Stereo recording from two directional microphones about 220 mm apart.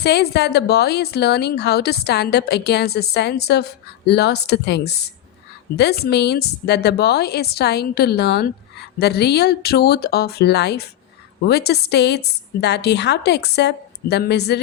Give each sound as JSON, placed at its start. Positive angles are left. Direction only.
{"t": 0.0, "sound": "a woman's voice", "side_deg": 50}